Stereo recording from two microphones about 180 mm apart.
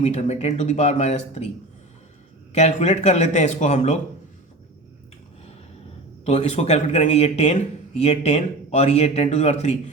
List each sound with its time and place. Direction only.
0.0 s speech: 35° left (ahead or behind)
2.5 s speech: 40° left (ahead or behind)
6.2 s speech: 40° left (ahead or behind)